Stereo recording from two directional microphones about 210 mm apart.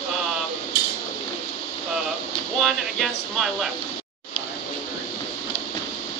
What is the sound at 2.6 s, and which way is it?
Speech, centre (ahead or behind).